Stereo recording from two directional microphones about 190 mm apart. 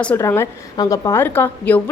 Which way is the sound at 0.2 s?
15° left (ahead or behind).